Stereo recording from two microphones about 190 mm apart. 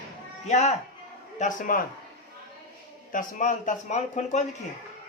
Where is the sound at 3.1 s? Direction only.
45° left (ahead or behind).